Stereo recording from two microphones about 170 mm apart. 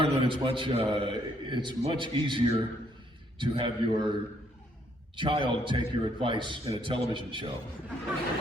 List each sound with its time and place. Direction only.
0.0 s a man's voice: 30° right (ahead or behind)